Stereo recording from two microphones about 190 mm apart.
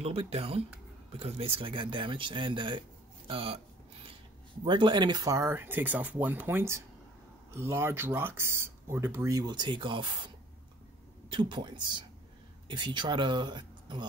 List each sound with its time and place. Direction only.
0.0 s speech: 30° right (ahead or behind)
4.6 s speech: 25° right (ahead or behind)